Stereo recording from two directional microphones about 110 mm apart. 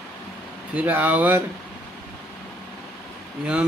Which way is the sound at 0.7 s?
15° right (ahead or behind).